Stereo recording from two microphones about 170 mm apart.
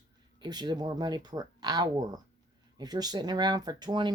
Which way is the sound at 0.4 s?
25° right (ahead or behind).